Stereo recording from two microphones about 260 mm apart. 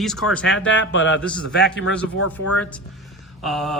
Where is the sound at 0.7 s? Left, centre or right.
Left.